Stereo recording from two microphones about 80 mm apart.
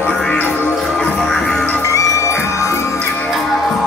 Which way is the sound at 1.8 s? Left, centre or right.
Left.